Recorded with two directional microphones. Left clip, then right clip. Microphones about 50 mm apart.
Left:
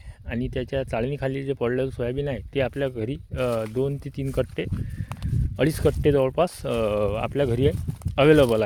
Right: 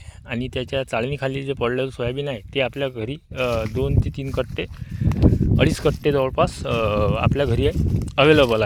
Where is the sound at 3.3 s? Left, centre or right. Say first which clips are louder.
Right 3 dB; left.